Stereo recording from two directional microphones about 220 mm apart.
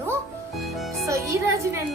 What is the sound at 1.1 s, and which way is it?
Speech, 15° right (ahead or behind).